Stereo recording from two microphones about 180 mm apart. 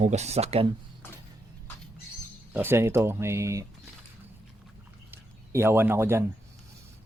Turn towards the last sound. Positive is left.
turn(degrees=-15)  # may be behind; listen again after turning